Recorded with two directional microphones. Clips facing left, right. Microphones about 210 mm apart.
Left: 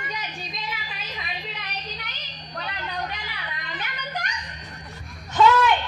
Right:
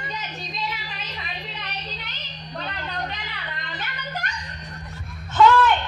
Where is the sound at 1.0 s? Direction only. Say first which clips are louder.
Even; 10° left (ahead or behind).